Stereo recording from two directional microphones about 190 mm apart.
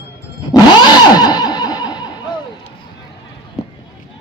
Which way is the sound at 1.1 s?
20° left (ahead or behind).